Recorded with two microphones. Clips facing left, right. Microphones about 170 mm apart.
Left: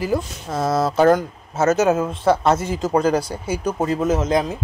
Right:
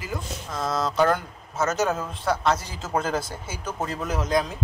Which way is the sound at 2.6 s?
50° left (ahead or behind).